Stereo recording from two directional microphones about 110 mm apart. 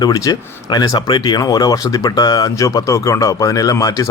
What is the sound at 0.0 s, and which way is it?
Speech, 40° left (ahead or behind).